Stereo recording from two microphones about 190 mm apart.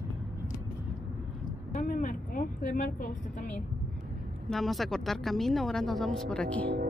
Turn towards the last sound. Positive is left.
turn(degrees=5)  # may be behind; listen again after turning